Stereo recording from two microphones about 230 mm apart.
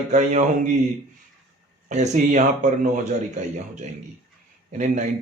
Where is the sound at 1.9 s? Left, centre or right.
Right.